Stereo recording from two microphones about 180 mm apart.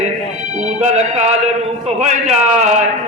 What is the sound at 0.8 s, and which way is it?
A man's voice, 40° right (ahead or behind).